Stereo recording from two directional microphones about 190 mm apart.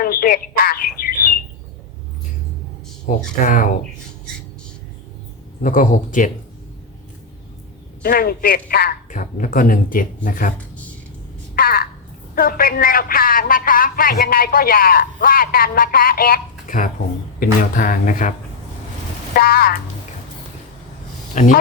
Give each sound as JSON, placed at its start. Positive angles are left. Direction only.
{"t": 0.0, "sound": "telephone", "side_deg": 50}
{"t": 3.1, "sound": "a man's voice", "side_deg": 45}
{"t": 5.6, "sound": "a man's voice", "side_deg": 45}
{"t": 8.0, "sound": "a man's voice", "side_deg": 55}
{"t": 11.5, "sound": "frog", "side_deg": 50}
{"t": 12.3, "sound": "a man's voice", "side_deg": 50}
{"t": 21.3, "sound": "speech", "side_deg": 40}